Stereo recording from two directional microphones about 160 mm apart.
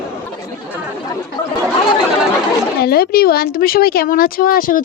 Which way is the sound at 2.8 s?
75° left (ahead or behind).